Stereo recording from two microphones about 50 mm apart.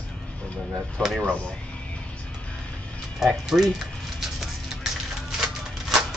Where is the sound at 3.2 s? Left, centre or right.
Centre.